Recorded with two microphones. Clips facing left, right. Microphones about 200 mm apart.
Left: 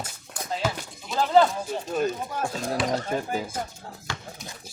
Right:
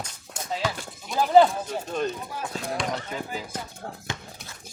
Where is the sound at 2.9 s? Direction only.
50° left (ahead or behind).